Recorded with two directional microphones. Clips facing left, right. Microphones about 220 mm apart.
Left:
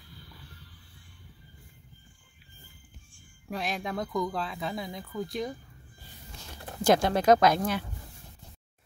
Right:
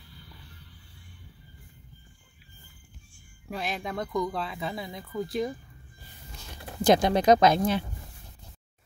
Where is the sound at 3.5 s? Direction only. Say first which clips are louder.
Even; centre (ahead or behind).